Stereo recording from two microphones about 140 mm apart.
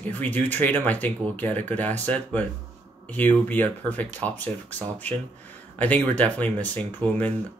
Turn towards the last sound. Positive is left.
turn(degrees=10)  # may be behind; listen again after turning